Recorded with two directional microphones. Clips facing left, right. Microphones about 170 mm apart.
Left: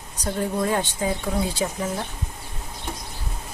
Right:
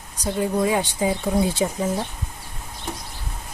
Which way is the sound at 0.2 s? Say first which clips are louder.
Right 3 dB; 5° right (ahead or behind).